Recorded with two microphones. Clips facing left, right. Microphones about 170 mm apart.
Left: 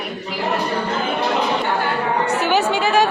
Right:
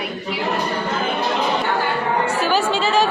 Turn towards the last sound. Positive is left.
turn(degrees=15)  # may be behind; listen again after turning